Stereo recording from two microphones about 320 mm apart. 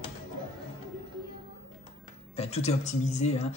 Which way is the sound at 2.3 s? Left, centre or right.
Centre.